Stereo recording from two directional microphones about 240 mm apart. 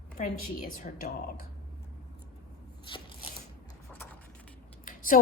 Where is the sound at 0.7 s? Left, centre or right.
Left.